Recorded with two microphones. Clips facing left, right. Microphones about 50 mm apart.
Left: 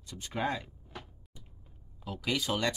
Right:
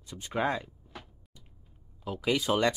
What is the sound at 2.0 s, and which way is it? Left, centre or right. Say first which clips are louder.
Speech: right 4 dB; centre.